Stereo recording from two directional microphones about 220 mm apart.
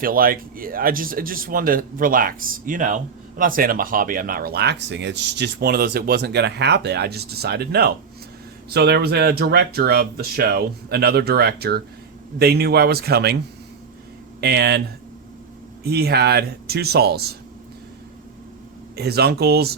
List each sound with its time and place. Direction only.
0.0 s speech: 40° right (ahead or behind)
14.4 s speech: 45° right (ahead or behind)
15.8 s speech: 45° right (ahead or behind)
18.9 s speech: 45° right (ahead or behind)